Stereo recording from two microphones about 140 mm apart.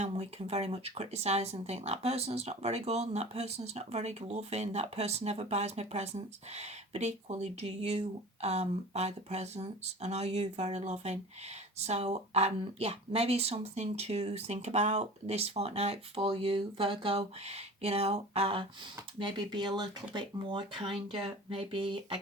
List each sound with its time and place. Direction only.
0.0 s speech: 50° right (ahead or behind)